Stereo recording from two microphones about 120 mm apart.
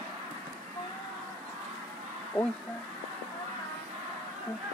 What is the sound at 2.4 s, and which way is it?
Speech, 50° left (ahead or behind).